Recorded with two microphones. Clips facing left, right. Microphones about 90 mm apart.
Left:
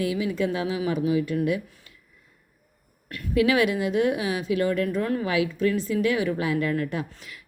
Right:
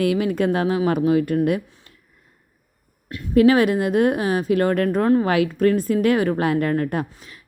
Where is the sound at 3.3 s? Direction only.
45° right (ahead or behind).